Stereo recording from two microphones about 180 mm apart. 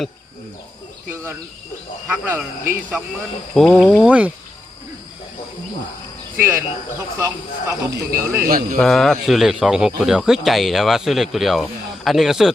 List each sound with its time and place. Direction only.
1.1 s speech: 15° right (ahead or behind)
3.5 s speech: centre (ahead or behind)
6.3 s speech: 15° right (ahead or behind)
7.7 s speech: 15° right (ahead or behind)
8.4 s speech: 50° right (ahead or behind)
8.8 s speech: 5° left (ahead or behind)